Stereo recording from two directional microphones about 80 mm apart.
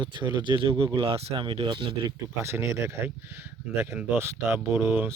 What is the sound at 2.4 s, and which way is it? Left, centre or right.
Speech, right.